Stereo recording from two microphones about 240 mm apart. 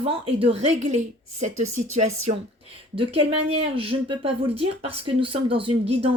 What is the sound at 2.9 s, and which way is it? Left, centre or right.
Speech, right.